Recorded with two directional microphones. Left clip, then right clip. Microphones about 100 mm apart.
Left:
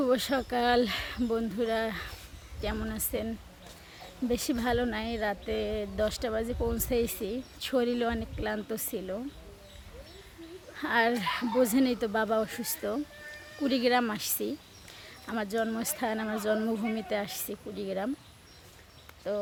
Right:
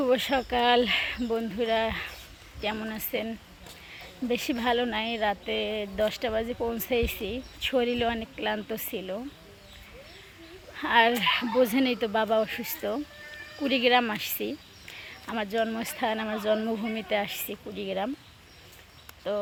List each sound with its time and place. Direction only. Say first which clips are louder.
0.0 s speech: right 3 dB; 35° left (ahead or behind)
3.9 s a sound: right 2 dB; 30° left (ahead or behind)
4.6 s speech: right 3 dB; 30° left (ahead or behind)
5.5 s speech: right 3 dB; 35° left (ahead or behind)
8.4 s speech: right 3 dB; 20° left (ahead or behind)
9.0 s speech: right 2 dB; 35° left (ahead or behind)
10.8 s speech: right 5 dB; 30° left (ahead or behind)
19.3 s speech: right 3 dB; 20° left (ahead or behind)